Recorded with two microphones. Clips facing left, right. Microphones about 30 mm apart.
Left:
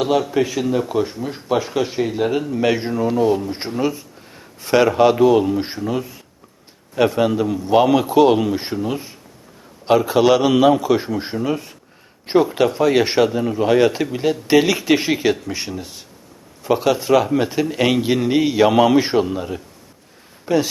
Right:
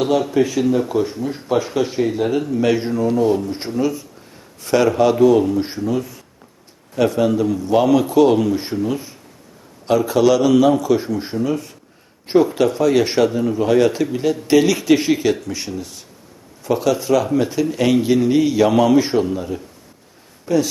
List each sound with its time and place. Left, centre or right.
0.0 s speech: centre
3.5 s speech: left